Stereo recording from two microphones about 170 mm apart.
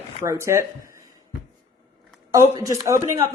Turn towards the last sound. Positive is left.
turn(degrees=-20)  # may be behind; listen again after turning